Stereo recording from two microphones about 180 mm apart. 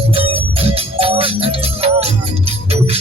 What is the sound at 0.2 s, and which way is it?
Music, 30° right (ahead or behind).